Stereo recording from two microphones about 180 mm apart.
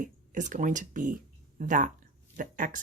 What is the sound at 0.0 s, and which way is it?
Speech, 45° right (ahead or behind).